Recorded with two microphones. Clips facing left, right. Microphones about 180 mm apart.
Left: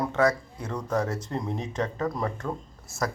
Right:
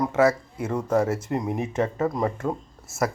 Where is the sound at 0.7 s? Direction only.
25° right (ahead or behind).